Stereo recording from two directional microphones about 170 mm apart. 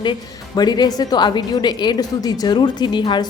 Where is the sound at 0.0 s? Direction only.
25° left (ahead or behind).